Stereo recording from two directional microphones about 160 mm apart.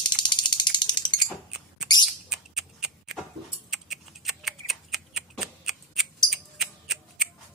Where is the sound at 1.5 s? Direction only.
5° right (ahead or behind).